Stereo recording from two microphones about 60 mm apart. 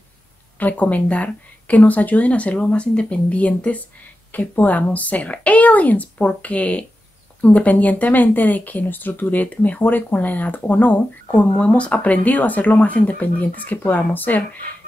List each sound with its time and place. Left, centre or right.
0.6 s speech: left